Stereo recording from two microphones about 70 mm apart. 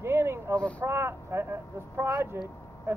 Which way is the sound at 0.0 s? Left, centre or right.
Right.